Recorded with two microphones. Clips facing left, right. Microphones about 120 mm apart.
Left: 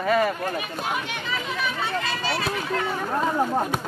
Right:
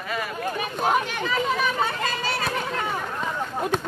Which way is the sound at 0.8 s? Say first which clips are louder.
Right 6 dB; 45° right (ahead or behind).